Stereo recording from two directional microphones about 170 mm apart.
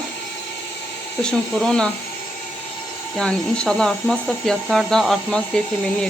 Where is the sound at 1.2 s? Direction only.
5° left (ahead or behind).